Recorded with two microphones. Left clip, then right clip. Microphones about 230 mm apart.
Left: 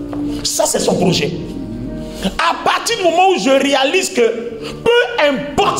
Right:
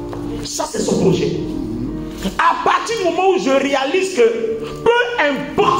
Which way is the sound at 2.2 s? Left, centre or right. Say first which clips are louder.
Even; left.